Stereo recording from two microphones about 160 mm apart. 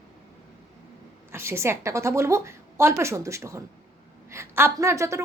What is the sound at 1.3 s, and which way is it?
A woman's voice, 15° right (ahead or behind).